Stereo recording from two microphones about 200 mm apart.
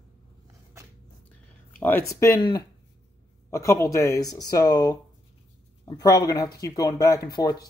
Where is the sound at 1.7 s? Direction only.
10° left (ahead or behind).